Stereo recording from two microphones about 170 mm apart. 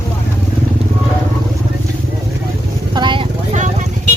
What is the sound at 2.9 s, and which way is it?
Vehicle, 25° right (ahead or behind).